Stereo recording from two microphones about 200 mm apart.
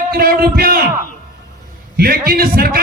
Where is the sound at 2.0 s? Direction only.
50° right (ahead or behind).